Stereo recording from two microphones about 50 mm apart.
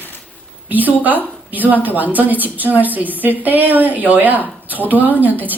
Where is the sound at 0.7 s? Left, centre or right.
Right.